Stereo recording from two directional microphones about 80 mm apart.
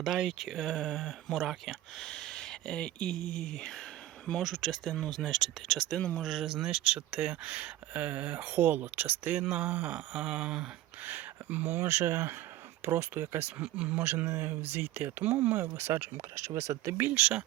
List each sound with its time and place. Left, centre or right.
0.0 s speech: centre
6.0 s speech: centre
6.2 s speech: centre
11.0 s speech: right
13.6 s speech: centre; by 16.9 s right
17.0 s speech: centre